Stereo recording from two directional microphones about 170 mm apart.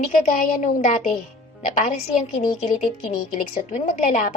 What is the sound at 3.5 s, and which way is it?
Speech, 45° left (ahead or behind).